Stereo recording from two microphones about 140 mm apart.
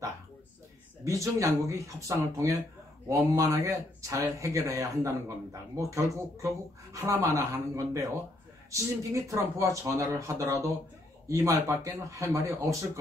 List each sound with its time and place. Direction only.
1.0 s speech: 20° right (ahead or behind)